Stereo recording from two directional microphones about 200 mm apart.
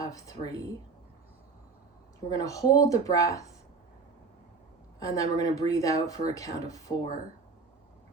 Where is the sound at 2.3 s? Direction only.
15° left (ahead or behind).